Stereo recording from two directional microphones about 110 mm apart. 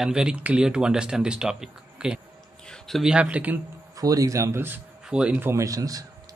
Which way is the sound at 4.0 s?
35° right (ahead or behind).